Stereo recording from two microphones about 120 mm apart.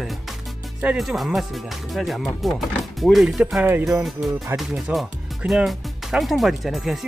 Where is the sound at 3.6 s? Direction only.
15° right (ahead or behind).